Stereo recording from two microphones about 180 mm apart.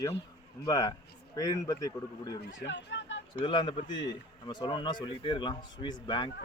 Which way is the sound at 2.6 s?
80° left.